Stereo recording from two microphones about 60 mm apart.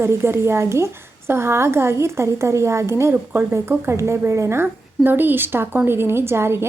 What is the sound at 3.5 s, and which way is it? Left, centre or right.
A woman's voice, right.